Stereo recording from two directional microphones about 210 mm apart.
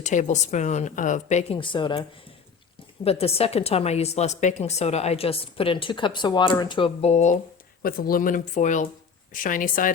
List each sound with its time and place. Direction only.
0.0 s a woman's voice: 35° left (ahead or behind)
7.8 s speech: 45° left (ahead or behind)